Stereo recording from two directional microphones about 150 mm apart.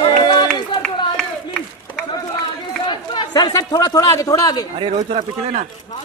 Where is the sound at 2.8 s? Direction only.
30° left (ahead or behind).